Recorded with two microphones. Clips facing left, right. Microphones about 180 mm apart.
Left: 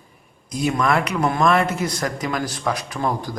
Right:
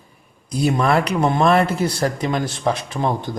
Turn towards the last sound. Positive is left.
turn(degrees=-25)  # may be behind; listen again after turning